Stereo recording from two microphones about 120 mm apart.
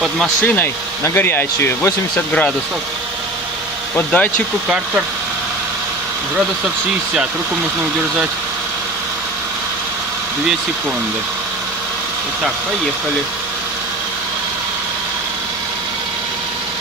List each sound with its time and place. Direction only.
0.4 s speech: 15° left (ahead or behind)
3.9 s speech: 15° left (ahead or behind)